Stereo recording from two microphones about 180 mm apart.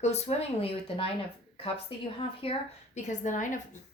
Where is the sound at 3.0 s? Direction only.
45° left (ahead or behind).